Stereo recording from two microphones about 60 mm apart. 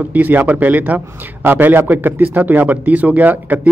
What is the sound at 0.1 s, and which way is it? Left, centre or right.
A man's voice, right.